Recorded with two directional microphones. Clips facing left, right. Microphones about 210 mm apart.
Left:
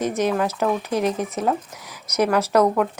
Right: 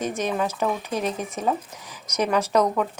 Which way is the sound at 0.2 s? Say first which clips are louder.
Left 4 dB; 10° left (ahead or behind).